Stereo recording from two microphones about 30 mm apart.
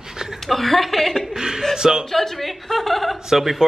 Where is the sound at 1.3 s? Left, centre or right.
Centre.